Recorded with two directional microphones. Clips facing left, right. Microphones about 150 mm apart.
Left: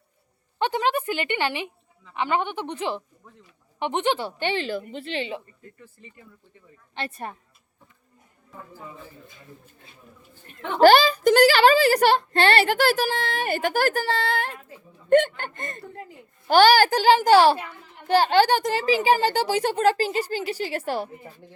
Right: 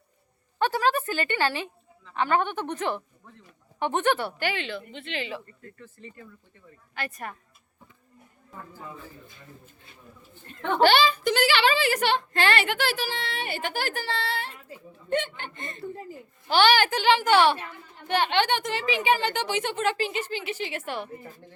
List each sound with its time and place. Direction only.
0.6 s a woman's voice: 20° left (ahead or behind)
4.4 s a woman's voice: 30° left (ahead or behind)
5.8 s a woman's voice: 15° left (ahead or behind)
6.9 s speech: 30° left (ahead or behind)
10.8 s a woman's voice: 40° left (ahead or behind)